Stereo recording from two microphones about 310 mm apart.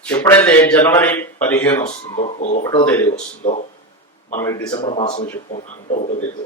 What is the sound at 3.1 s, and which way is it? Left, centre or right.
Speech, left.